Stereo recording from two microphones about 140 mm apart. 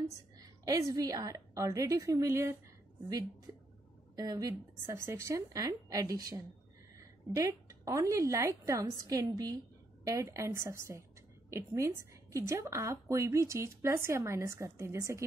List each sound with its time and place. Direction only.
0.4 s a woman's voice: 25° right (ahead or behind)
4.1 s a woman's voice: 25° right (ahead or behind)